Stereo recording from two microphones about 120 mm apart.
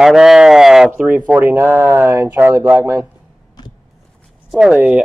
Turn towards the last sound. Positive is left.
turn(degrees=-10)  # may be behind; listen again after turning